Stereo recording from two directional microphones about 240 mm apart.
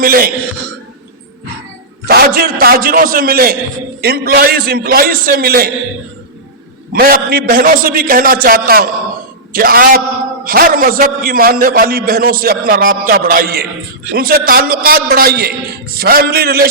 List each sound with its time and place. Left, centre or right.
0.0 s a man's voice: right
2.0 s a man's voice: right
6.9 s a man's voice: right